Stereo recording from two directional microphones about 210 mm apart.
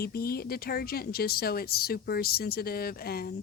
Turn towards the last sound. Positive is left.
turn(degrees=45)  # may be behind; listen again after turning